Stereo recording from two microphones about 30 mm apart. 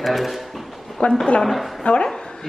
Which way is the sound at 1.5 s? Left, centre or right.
Centre.